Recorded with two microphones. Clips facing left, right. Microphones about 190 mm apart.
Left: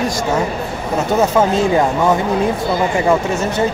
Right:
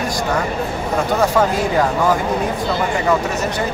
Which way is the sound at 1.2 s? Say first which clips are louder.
Left 4 dB; 25° left (ahead or behind).